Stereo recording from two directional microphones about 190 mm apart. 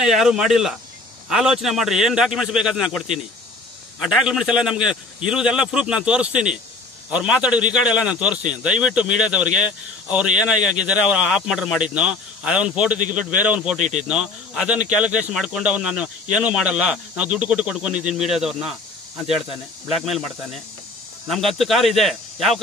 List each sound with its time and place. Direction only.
0.0 s a man's voice: centre (ahead or behind)
13.7 s speech: 40° right (ahead or behind)
14.0 s speech: 5° right (ahead or behind)
19.9 s speech: centre (ahead or behind)